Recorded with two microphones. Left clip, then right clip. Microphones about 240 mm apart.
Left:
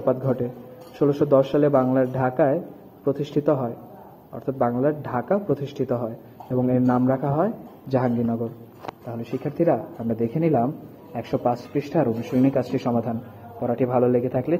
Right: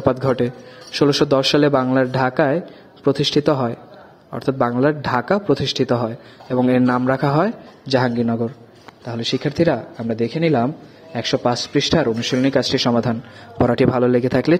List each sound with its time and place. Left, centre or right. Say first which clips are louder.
0.0 s a man's voice: right 5 dB; right